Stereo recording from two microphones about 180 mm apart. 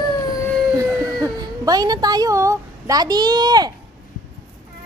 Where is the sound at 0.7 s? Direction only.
20° right (ahead or behind).